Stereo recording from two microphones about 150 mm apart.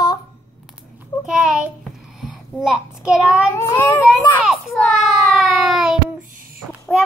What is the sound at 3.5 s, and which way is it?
Cat, 15° left (ahead or behind).